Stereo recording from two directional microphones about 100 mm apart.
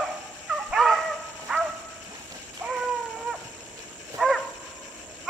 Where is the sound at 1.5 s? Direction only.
5° right (ahead or behind).